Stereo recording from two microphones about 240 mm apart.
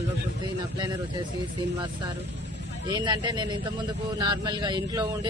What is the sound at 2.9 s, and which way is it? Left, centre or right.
Speech, centre.